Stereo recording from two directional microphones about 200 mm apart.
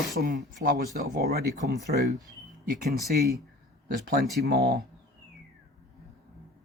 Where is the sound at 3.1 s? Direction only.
50° right (ahead or behind).